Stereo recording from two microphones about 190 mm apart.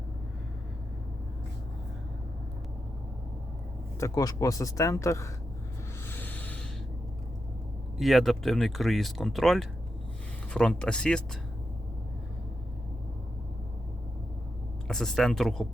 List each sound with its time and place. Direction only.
4.0 s speech: 20° left (ahead or behind)
6.1 s rub: 10° left (ahead or behind)
7.9 s speech: centre (ahead or behind)
14.8 s speech: 5° left (ahead or behind)